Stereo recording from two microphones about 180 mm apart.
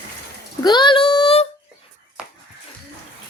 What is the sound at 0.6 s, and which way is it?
Speech, 25° left (ahead or behind).